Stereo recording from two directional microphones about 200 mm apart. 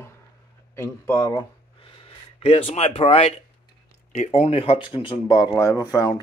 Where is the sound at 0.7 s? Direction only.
10° left (ahead or behind).